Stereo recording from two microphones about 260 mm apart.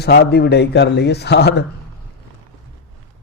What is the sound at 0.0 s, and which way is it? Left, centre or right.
A man's voice, left.